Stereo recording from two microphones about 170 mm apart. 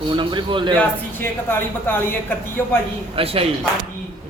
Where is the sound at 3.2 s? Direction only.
35° right (ahead or behind).